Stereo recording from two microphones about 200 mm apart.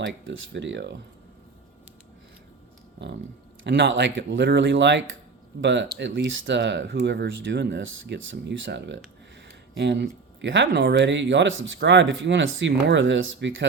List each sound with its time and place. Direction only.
0.0 s speech: 65° right (ahead or behind)
3.6 s speech: 65° right (ahead or behind)